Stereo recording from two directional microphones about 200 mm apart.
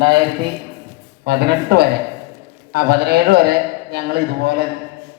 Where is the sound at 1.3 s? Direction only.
55° right (ahead or behind).